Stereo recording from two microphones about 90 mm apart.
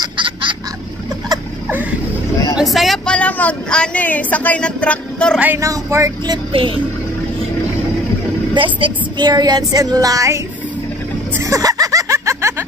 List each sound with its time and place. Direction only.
0.0 s a sound: 65° right (ahead or behind)
2.6 s vehicle: centre (ahead or behind)
3.1 s speech: 15° left (ahead or behind)
5.6 s speech: 35° right (ahead or behind)
6.5 s speech: 85° right
8.5 s a woman's voice: 70° right (ahead or behind)
9.3 s child singing: 45° right (ahead or behind)
11.4 s music: 40° right (ahead or behind)